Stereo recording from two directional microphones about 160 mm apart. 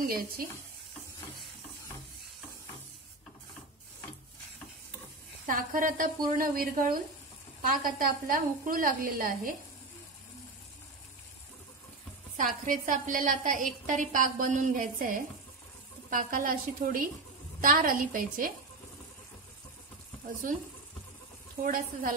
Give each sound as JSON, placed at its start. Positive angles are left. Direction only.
{"t": 0.0, "sound": "a woman's voice", "side_deg": -60}
{"t": 5.5, "sound": "a woman's voice", "side_deg": -60}
{"t": 12.4, "sound": "a woman's voice", "side_deg": -55}
{"t": 21.6, "sound": "a woman's voice", "side_deg": -60}